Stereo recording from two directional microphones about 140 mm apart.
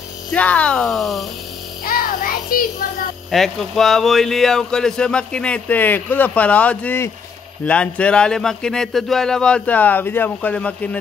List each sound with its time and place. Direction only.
0.3 s speech: 10° left (ahead or behind)
1.9 s music: 90° left
3.3 s speech: centre (ahead or behind)